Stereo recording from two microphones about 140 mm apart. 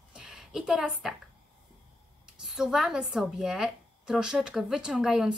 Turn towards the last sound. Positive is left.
turn(degrees=-5)  # may be behind; listen again after turning